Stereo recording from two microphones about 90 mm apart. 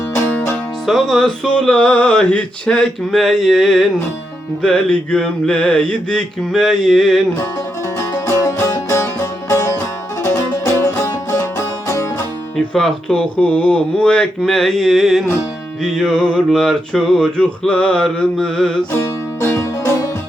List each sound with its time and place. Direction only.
0.3 s music: 20° left (ahead or behind)
0.9 s music: centre (ahead or behind)
7.9 s music: 40° left (ahead or behind)
12.5 s music: 5° left (ahead or behind)
18.9 s music: 35° left (ahead or behind)